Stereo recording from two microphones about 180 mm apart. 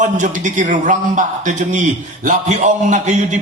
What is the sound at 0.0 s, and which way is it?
A man's voice, 45° right (ahead or behind).